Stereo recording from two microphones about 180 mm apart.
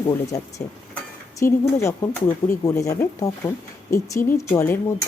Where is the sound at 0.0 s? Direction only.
20° left (ahead or behind).